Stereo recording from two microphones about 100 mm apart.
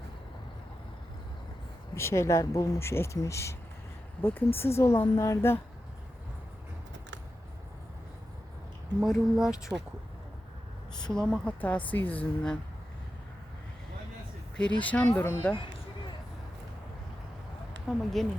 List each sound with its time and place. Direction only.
2.0 s speech: 25° left (ahead or behind)
9.0 s speech: centre (ahead or behind)
11.1 s a woman's voice: 5° left (ahead or behind)
14.8 s a woman's voice: 15° left (ahead or behind)
17.8 s speech: 5° left (ahead or behind)